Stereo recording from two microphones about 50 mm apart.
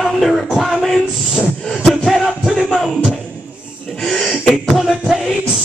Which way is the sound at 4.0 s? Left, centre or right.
Centre.